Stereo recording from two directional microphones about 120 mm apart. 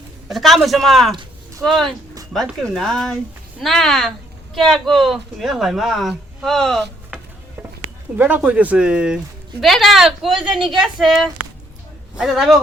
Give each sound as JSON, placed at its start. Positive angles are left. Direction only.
{"t": 0.3, "sound": "speech", "side_deg": 0}
{"t": 8.2, "sound": "a man's voice", "side_deg": -15}